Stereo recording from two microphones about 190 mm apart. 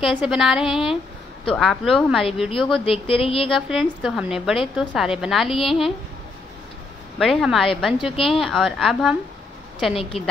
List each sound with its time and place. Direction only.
0.0 s a woman's voice: centre (ahead or behind)
2.8 s speech: 30° left (ahead or behind)
3.4 s a woman's voice: centre (ahead or behind)
7.2 s a woman's voice: centre (ahead or behind)
9.9 s speech: 30° left (ahead or behind)